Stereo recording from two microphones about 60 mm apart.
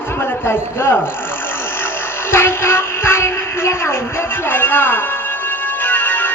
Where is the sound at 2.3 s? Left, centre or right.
Left.